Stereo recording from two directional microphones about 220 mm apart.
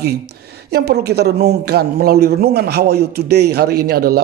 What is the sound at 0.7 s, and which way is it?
A man's voice, 45° right (ahead or behind).